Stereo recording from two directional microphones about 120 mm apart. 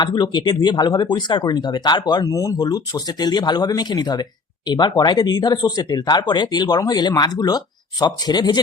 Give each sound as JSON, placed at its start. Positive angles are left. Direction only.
{"t": 0.0, "sound": "speech", "side_deg": 40}